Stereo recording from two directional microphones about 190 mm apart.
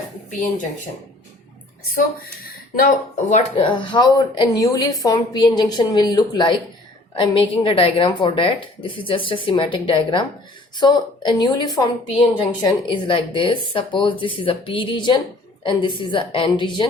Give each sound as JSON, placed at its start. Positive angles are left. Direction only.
{"t": 1.9, "sound": "speech", "side_deg": 50}